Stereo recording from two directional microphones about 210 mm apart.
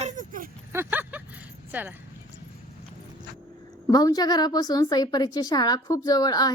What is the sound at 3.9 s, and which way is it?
A woman's voice, 20° left (ahead or behind).